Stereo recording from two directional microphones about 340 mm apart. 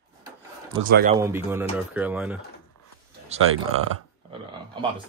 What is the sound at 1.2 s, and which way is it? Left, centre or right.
Speech, centre.